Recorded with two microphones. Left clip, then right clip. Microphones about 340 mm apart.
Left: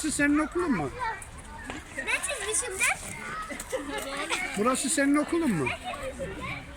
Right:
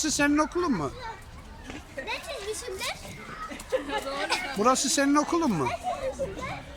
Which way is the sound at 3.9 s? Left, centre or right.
Right.